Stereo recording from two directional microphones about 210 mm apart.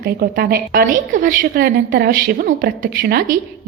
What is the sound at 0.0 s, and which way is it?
A woman's voice, 45° right (ahead or behind).